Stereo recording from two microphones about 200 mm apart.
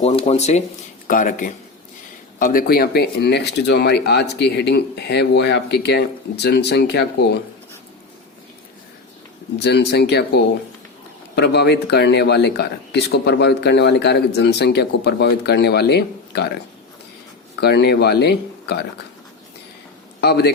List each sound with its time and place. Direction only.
0.0 s speech: 30° left (ahead or behind); by 7.4 s 55° left (ahead or behind)
9.6 s speech: 55° left (ahead or behind)
17.6 s speech: 55° left (ahead or behind)
20.2 s a man's voice: 55° left (ahead or behind)